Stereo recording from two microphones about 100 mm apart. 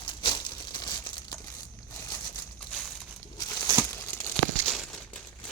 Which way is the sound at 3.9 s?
30° left (ahead or behind).